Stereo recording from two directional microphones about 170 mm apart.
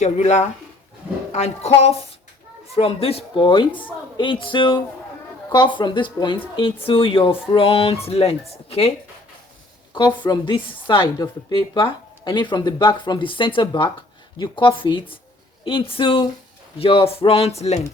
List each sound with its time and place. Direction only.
0.0 s speech: 40° left (ahead or behind)
10.2 s speech: 25° left (ahead or behind)